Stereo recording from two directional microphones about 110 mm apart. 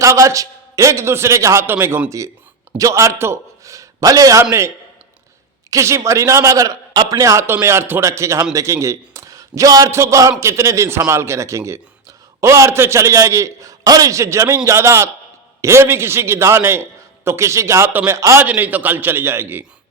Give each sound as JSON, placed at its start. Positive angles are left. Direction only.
{"t": 0.0, "sound": "a man's voice", "side_deg": -30}
{"t": 5.7, "sound": "a man's voice", "side_deg": -30}
{"t": 18.4, "sound": "a man's voice", "side_deg": -15}